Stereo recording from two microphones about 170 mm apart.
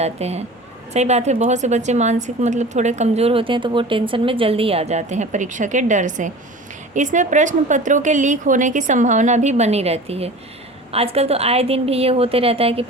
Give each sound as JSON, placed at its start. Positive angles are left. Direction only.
{"t": 0.0, "sound": "a woman's voice", "side_deg": -40}